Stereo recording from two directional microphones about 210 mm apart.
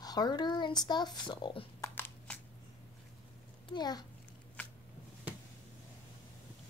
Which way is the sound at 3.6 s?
20° left (ahead or behind).